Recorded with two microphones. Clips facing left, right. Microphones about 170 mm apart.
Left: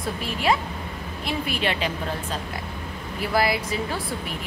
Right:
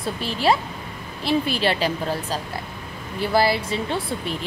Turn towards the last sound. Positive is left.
turn(degrees=-30)  # may be behind; listen again after turning